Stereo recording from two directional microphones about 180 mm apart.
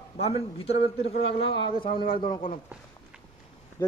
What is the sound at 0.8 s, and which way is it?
Speech, 90° left.